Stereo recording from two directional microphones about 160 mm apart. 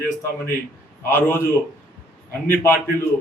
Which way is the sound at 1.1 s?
15° left (ahead or behind).